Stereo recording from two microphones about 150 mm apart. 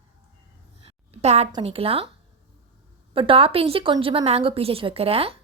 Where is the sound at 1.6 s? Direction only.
40° right (ahead or behind).